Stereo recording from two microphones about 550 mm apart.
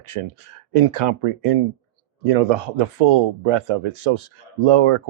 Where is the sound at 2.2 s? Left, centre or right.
Right.